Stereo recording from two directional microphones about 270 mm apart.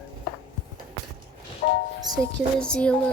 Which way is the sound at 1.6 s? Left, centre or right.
Left.